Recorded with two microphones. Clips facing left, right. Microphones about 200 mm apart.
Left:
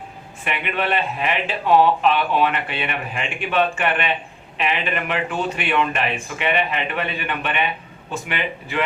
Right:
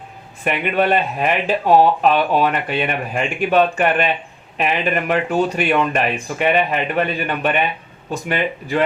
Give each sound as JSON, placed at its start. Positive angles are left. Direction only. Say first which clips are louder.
{"t": 0.4, "sound": "speech", "louder": "right 6 dB", "side_deg": -40}